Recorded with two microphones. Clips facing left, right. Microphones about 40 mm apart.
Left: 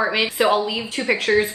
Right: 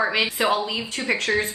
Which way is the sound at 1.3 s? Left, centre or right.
Left.